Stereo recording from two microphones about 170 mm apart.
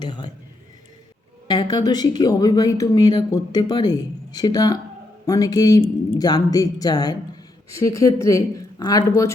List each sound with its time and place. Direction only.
0.0 s speech: 25° left (ahead or behind)
1.5 s speech: 25° left (ahead or behind)